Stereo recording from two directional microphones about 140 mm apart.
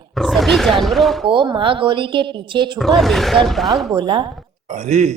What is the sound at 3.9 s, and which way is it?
Speech, 35° right (ahead or behind).